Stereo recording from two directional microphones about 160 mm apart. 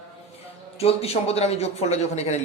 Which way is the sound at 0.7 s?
40° left (ahead or behind).